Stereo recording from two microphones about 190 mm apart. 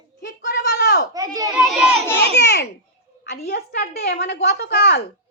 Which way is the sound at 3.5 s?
60° left (ahead or behind).